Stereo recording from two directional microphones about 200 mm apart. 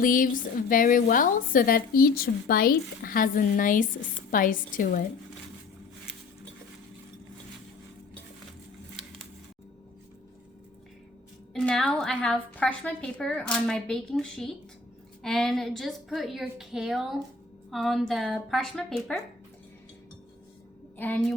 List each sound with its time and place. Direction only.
0.0 s a woman's voice: 45° left (ahead or behind)
11.5 s a woman's voice: 5° left (ahead or behind)
21.0 s a woman's voice: 10° left (ahead or behind)